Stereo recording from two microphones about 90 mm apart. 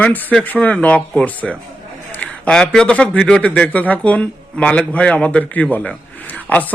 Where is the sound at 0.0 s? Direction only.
15° left (ahead or behind).